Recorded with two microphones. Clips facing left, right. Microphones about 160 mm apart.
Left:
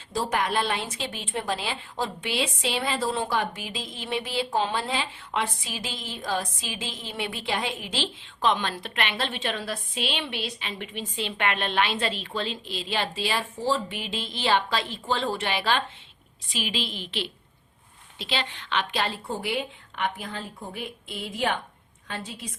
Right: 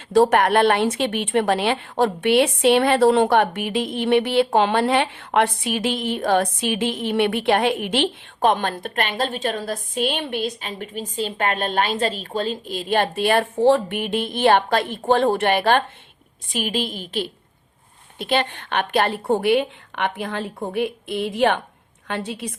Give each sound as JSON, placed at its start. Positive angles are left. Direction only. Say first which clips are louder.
{"t": 0.1, "sound": "a woman's voice", "louder": "right 11 dB", "side_deg": -60}